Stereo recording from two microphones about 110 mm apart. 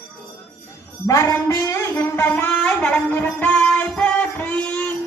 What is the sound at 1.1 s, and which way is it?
Music, 30° left (ahead or behind).